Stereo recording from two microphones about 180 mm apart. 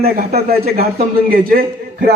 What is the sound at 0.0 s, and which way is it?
A man's voice, 60° right (ahead or behind).